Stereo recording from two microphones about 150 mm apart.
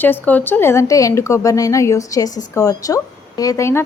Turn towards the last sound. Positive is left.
turn(degrees=20)  # may be behind; listen again after turning